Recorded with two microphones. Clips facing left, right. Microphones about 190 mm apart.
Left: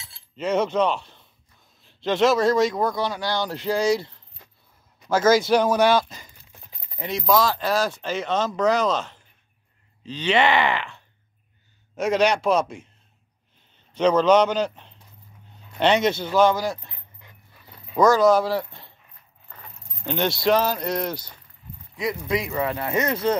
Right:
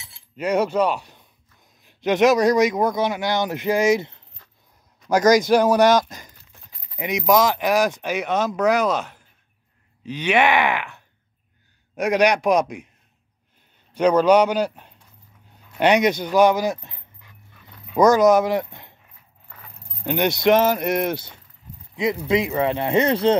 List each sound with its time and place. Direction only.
0.0 s speech: 15° right (ahead or behind)
4.4 s a sound: 15° left (ahead or behind)
5.1 s speech: 15° right (ahead or behind)
13.9 s speech: 10° right (ahead or behind)
20.1 s speech: 15° right (ahead or behind)